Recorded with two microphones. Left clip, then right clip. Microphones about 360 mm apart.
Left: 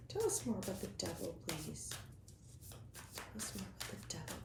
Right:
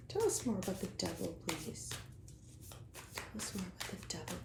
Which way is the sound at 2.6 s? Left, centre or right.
Centre.